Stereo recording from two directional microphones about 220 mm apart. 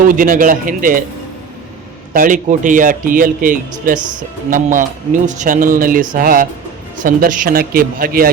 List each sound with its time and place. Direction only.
0.0 s speech: 40° right (ahead or behind)
2.1 s speech: 35° right (ahead or behind)
3.9 s speech: 20° right (ahead or behind)
4.4 s speech: 35° right (ahead or behind)